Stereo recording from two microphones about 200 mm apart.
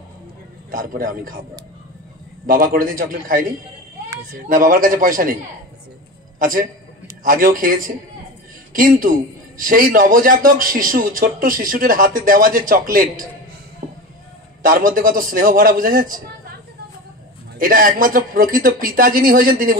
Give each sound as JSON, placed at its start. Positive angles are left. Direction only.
{"t": 0.7, "sound": "a man's voice", "side_deg": -45}
{"t": 2.4, "sound": "a man's voice", "side_deg": -45}
{"t": 6.4, "sound": "a man's voice", "side_deg": -45}
{"t": 14.6, "sound": "a man's voice", "side_deg": -45}
{"t": 17.6, "sound": "a man's voice", "side_deg": -45}